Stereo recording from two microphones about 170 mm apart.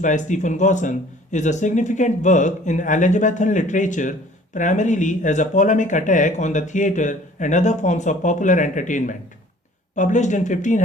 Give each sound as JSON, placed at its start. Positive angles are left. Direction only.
{"t": 0.0, "sound": "speech", "side_deg": 45}